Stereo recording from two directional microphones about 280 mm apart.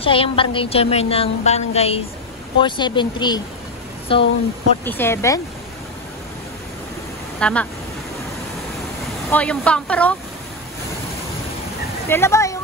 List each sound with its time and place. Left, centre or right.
0.0 s a woman's voice: centre
4.8 s speech: centre
7.3 s speech: centre
9.3 s a woman's voice: centre
12.1 s speech: centre